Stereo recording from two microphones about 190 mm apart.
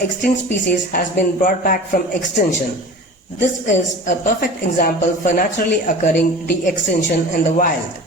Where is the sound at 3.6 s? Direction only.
40° left (ahead or behind).